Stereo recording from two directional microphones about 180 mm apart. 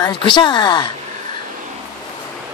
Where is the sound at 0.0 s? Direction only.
25° left (ahead or behind).